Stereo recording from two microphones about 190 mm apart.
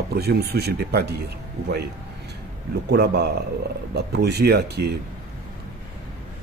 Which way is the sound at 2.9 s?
60° right (ahead or behind).